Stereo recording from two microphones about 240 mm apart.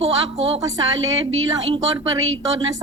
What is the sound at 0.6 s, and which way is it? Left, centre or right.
A woman's voice, centre.